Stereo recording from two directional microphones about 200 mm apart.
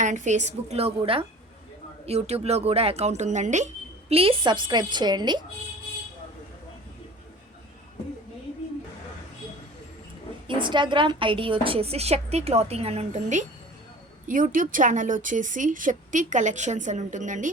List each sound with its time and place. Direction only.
0.0 s a woman's voice: 40° right (ahead or behind); by 5.4 s 20° right (ahead or behind)
10.4 s a woman's voice: 25° right (ahead or behind)